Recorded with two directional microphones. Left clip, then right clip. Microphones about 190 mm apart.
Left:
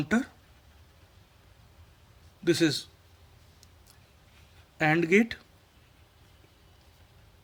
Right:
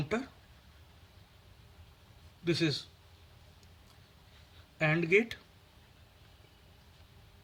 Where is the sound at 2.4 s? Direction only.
55° left (ahead or behind).